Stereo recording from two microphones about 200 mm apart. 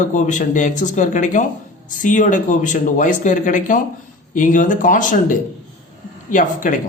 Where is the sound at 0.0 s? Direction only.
40° left (ahead or behind).